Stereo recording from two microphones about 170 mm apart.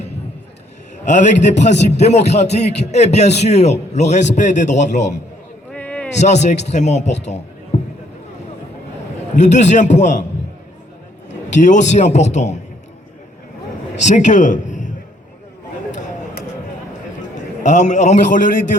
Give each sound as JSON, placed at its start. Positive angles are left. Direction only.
{"t": 1.0, "sound": "a man's voice", "side_deg": 45}
{"t": 5.7, "sound": "a sound", "side_deg": 10}
{"t": 6.1, "sound": "a man's voice", "side_deg": 40}
{"t": 9.3, "sound": "a man's voice", "side_deg": 45}
{"t": 11.5, "sound": "a man's voice", "side_deg": 45}
{"t": 14.0, "sound": "a man's voice", "side_deg": 45}
{"t": 17.3, "sound": "a man's voice", "side_deg": 45}